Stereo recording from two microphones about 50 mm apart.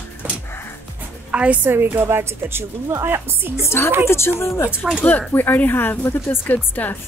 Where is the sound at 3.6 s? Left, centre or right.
Left.